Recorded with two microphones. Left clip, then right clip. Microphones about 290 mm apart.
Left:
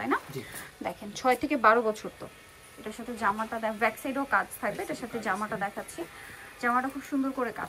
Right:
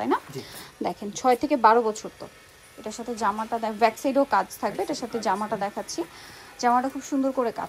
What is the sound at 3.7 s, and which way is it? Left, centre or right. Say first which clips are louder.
A woman's voice: right 10 dB; centre.